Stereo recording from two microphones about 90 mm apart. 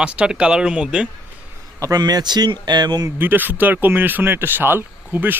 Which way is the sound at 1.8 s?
45° right (ahead or behind).